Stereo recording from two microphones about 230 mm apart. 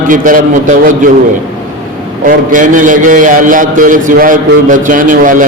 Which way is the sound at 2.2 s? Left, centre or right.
Right.